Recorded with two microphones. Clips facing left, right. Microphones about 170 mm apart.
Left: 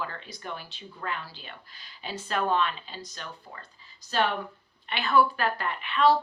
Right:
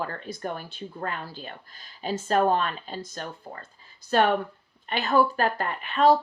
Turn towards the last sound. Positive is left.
turn(degrees=-45)  # may be behind; listen again after turning